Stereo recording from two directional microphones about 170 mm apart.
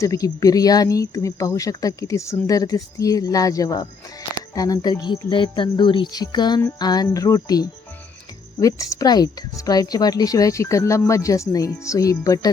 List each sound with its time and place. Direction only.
0.0 s speech: 20° left (ahead or behind)